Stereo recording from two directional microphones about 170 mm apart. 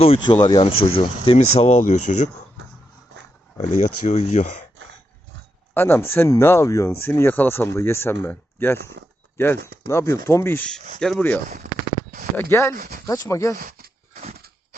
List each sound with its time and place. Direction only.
0.0 s speech: 35° left (ahead or behind)
1.8 s speech: 45° left (ahead or behind)
3.6 s speech: 40° left (ahead or behind)
5.7 s speech: 15° left (ahead or behind)
8.8 s speech: 90° right
9.8 s speech: 15° left (ahead or behind)
11.4 s speech: 50° right (ahead or behind)
12.4 s speech: 15° left (ahead or behind)
12.7 s speech: 60° right (ahead or behind)
13.2 s speech: 20° left (ahead or behind)
13.6 s speech: 60° right (ahead or behind)
14.1 s a sound: 40° right (ahead or behind)